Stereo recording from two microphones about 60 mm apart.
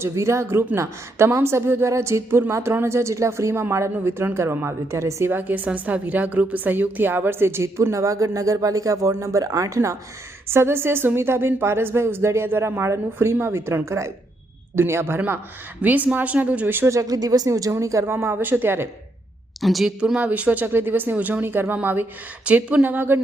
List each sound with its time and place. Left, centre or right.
0.0 s a woman's voice: right
5.3 s a woman's voice: right
10.5 s a woman's voice: right
15.8 s speech: right
16.9 s speech: right
18.0 s speech: right
19.6 s a woman's voice: centre
20.1 s speech: right
22.4 s speech: right